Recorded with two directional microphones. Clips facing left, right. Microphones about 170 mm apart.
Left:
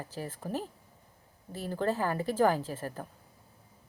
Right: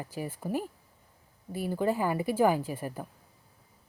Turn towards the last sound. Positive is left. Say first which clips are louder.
# right 2 dB
turn(degrees=-10)  # may be behind; listen again after turning